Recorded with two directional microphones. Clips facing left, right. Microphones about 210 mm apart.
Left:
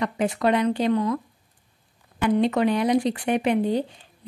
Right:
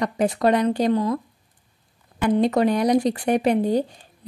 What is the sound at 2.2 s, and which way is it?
Speech, 35° right (ahead or behind).